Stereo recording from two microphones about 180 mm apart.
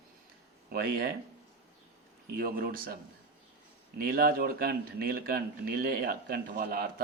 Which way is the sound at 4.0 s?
55° right (ahead or behind).